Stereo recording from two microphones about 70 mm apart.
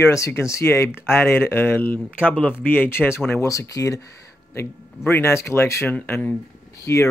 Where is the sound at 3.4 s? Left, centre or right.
Left.